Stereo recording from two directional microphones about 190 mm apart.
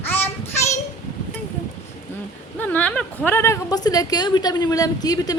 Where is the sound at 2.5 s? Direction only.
10° left (ahead or behind).